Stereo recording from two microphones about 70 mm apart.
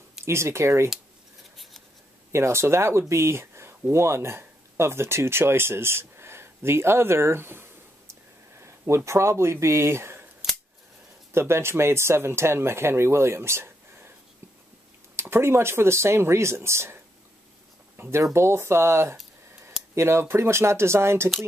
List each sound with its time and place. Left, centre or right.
0.2 s speech: right
2.3 s speech: right
10.4 s scissors: centre
11.3 s speech: right
15.1 s speech: right
18.1 s speech: right